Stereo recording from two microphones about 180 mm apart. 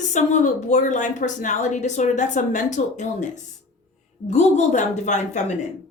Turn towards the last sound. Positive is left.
turn(degrees=40)  # may be behind; listen again after turning